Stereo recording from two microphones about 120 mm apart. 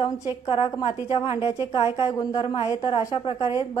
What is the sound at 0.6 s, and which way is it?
A woman's voice, 35° left (ahead or behind).